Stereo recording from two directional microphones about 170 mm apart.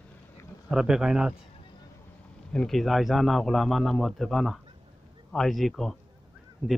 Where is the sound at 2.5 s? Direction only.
Centre (ahead or behind).